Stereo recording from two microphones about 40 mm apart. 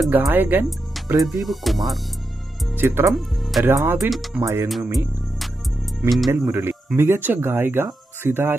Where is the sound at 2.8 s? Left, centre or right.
Right.